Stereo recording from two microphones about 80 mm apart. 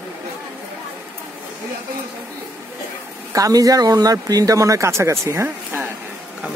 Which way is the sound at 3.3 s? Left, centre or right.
Right.